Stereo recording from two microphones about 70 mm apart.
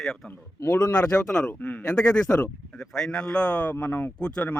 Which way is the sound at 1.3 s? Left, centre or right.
Centre.